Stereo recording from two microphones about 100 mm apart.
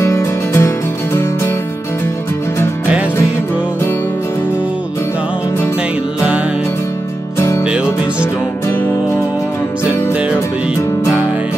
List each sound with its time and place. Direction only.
0.0 s music: 30° left (ahead or behind)
7.3 s music: 25° left (ahead or behind)